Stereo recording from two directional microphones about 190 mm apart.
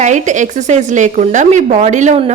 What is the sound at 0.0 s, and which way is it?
A woman's voice, 40° right (ahead or behind).